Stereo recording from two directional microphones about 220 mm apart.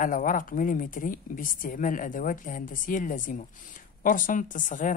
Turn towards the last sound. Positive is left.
turn(degrees=35)  # may be behind; listen again after turning